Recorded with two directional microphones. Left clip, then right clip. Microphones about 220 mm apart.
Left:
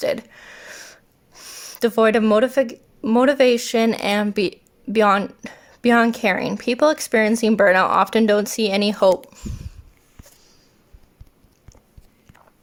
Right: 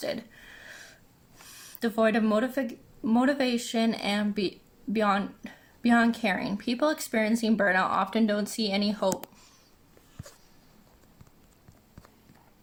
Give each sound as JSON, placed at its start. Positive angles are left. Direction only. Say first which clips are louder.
{"t": 0.0, "sound": "a sound", "louder": "left 11 dB", "side_deg": 50}
{"t": 1.5, "sound": "speech", "louder": "left 11 dB", "side_deg": 45}
{"t": 9.3, "sound": "speech", "louder": "left 16 dB", "side_deg": 30}